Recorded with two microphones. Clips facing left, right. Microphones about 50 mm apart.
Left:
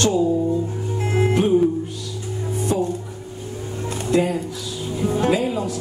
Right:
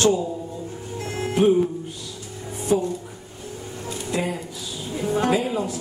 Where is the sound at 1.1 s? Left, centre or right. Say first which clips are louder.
Left 8 dB; left.